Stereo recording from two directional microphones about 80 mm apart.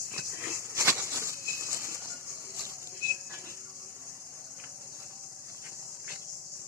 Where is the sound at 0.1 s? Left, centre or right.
Right.